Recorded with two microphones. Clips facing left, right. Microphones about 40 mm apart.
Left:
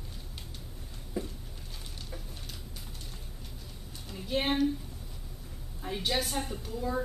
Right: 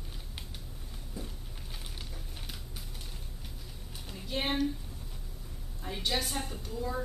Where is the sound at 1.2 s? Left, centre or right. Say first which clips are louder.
Left 7 dB; left.